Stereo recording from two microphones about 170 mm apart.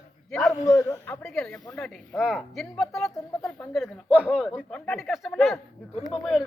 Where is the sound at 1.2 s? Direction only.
5° left (ahead or behind).